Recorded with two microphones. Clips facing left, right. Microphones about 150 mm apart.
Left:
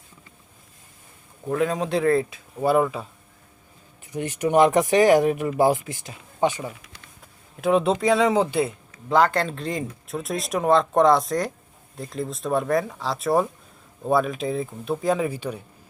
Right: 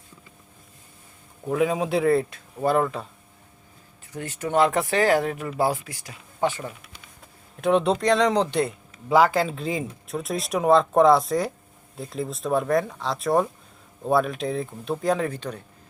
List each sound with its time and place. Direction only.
1.5 s speech: 5° right (ahead or behind)
4.0 s speech: 20° left (ahead or behind)
7.6 s speech: centre (ahead or behind)